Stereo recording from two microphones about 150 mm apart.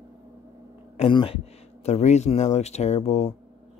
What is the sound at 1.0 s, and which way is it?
Speech, 35° left (ahead or behind).